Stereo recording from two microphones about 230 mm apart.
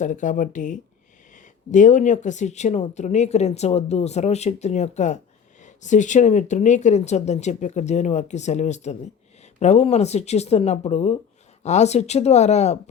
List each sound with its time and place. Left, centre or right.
0.0 s speech: left